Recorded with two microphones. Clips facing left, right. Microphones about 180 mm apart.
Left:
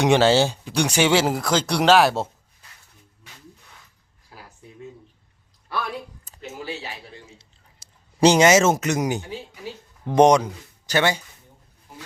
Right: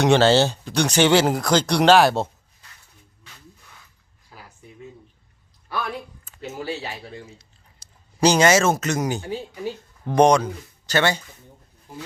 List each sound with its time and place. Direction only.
0.0 s speech: 10° left (ahead or behind)
6.4 s speech: 30° right (ahead or behind)
7.3 s a sound: 25° left (ahead or behind)
10.1 s speech: 20° left (ahead or behind)